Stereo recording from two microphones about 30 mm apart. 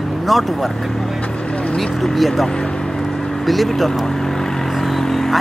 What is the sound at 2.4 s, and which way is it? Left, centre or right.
Vehicle, left.